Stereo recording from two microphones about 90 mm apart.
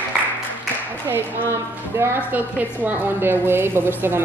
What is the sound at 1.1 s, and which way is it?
A woman's voice, 25° right (ahead or behind).